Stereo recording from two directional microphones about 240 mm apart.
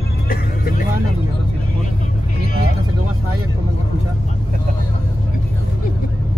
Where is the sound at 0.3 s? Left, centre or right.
Left.